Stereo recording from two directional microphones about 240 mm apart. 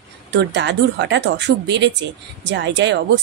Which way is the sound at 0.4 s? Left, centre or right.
Right.